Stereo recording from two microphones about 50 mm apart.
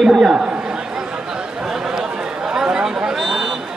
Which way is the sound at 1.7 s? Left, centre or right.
Centre.